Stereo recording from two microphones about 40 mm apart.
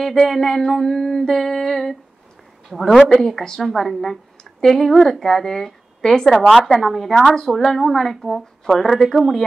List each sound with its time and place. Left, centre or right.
0.0 s a woman's voice: centre
6.8 s speech: centre
7.2 s a woman's voice: centre
7.5 s speech: centre